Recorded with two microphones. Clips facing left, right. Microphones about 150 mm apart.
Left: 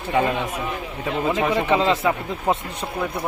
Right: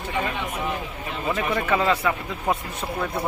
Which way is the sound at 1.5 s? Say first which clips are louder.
Left 3 dB; 20° left (ahead or behind).